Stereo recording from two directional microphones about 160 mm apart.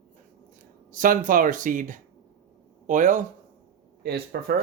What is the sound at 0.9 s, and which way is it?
Speech, 55° right (ahead or behind).